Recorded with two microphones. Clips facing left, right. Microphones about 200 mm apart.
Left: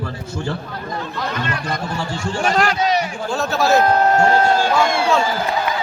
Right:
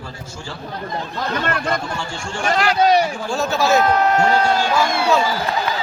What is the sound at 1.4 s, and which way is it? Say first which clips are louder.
Speech: right 4 dB; 50° right (ahead or behind).